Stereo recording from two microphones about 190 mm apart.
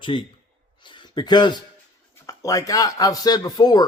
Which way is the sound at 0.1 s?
30° left (ahead or behind).